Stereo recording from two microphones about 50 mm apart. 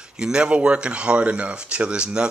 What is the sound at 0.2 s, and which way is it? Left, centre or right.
Speech, centre.